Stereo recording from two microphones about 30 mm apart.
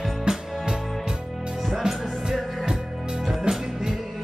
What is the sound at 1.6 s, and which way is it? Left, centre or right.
Music, centre.